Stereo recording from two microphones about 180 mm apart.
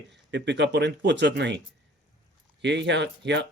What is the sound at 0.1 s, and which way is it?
Speech, 75° right (ahead or behind).